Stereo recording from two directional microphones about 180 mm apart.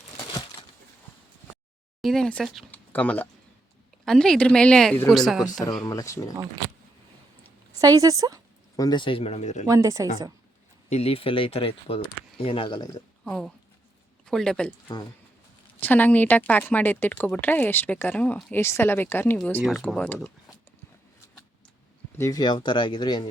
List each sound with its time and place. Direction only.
2.0 s a woman's voice: centre (ahead or behind)
5.8 s speech: 20° left (ahead or behind)
7.7 s a woman's voice: 20° right (ahead or behind)
8.7 s speech: 20° left (ahead or behind); by 9.6 s 40° left (ahead or behind)
9.6 s speech: 15° right (ahead or behind)
10.8 s speech: 35° left (ahead or behind)
13.2 s a woman's voice: 5° left (ahead or behind)
15.8 s speech: 10° left (ahead or behind)
19.6 s a woman's voice: centre (ahead or behind)
22.2 s speech: 20° left (ahead or behind)